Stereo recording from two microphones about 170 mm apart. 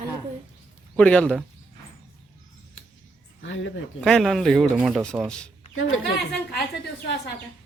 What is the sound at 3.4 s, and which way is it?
Speech, 90° left.